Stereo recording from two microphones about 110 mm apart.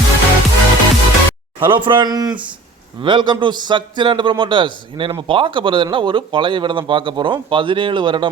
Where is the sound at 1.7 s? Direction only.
50° right (ahead or behind).